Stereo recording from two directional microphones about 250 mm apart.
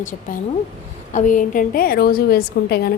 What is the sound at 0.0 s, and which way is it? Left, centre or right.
A woman's voice, left.